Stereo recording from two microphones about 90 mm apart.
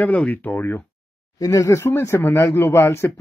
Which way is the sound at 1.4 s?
40° left (ahead or behind).